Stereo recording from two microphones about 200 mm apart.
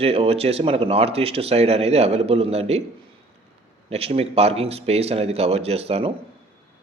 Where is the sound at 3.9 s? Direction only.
30° right (ahead or behind).